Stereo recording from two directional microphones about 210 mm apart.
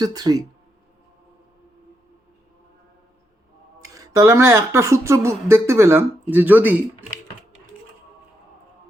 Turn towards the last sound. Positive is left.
turn(degrees=-10)  # may be behind; listen again after turning